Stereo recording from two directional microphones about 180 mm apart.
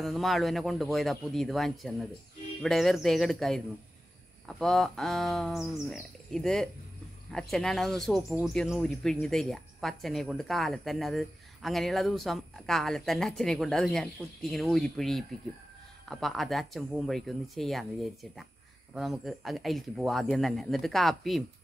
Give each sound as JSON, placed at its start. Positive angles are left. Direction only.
{"t": 0.0, "sound": "speech", "side_deg": 0}
{"t": 18.9, "sound": "speech", "side_deg": 0}